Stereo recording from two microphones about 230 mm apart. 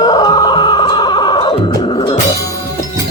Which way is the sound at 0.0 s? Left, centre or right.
Centre.